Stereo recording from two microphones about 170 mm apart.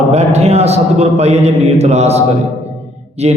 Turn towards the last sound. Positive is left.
turn(degrees=-40)  # may be behind; listen again after turning